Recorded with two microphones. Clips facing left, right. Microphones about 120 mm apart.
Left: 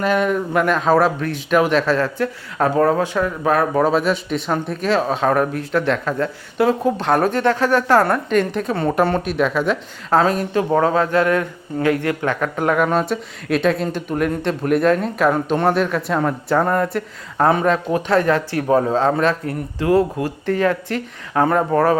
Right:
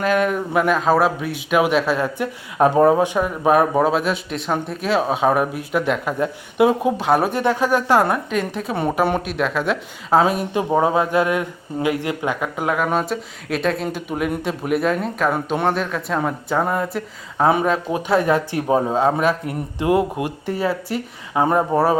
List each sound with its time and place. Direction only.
0.0 s speech: centre (ahead or behind)
3.8 s speech: centre (ahead or behind)
8.3 s a woman's voice: 5° right (ahead or behind)